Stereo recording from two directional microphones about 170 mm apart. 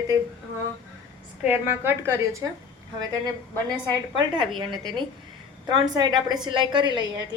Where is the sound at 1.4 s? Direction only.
10° right (ahead or behind).